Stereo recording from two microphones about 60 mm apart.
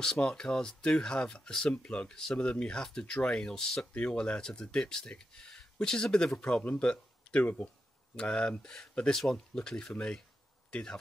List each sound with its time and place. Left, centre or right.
0.0 s speech: centre; by 7.7 s left
8.2 s speech: centre